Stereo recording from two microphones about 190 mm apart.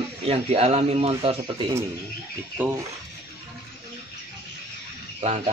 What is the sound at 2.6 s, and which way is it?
Speech, 10° right (ahead or behind).